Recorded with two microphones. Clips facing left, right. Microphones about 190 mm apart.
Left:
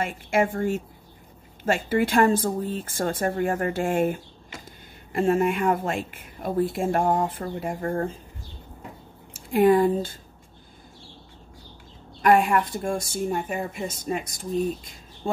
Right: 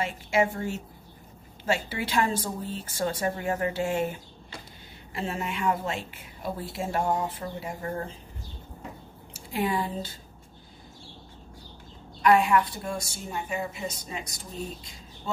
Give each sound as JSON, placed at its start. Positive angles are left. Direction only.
{"t": 0.0, "sound": "a woman's voice", "side_deg": 50}
{"t": 9.3, "sound": "speech", "side_deg": 50}
{"t": 12.2, "sound": "a woman's voice", "side_deg": 50}